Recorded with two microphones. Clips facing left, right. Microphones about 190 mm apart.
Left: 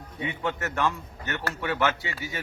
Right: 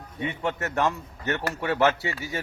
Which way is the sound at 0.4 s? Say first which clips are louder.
Right 2 dB; 25° right (ahead or behind).